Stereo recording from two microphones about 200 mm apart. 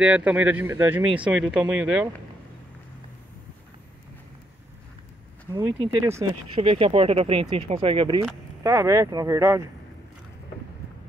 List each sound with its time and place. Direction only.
0.0 s speech: 5° right (ahead or behind)
5.5 s speech: 10° right (ahead or behind)
6.5 s speech: 30° right (ahead or behind)
8.6 s speech: 15° right (ahead or behind)